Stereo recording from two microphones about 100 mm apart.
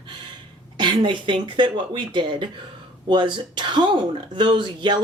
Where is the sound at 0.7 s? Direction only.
50° right (ahead or behind).